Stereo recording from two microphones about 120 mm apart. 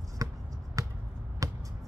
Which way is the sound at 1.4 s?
30° right (ahead or behind).